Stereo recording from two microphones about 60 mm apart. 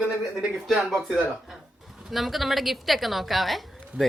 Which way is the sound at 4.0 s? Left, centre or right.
Centre.